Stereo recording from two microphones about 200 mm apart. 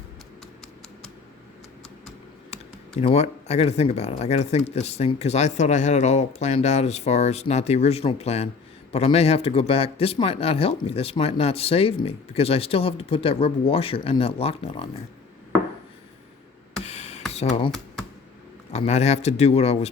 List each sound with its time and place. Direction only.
3.0 s speech: 30° left (ahead or behind)
16.8 s a sound: 35° left (ahead or behind)
17.3 s speech: 35° left (ahead or behind)
18.7 s speech: 35° left (ahead or behind)